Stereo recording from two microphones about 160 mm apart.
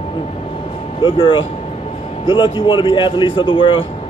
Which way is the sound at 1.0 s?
35° left (ahead or behind).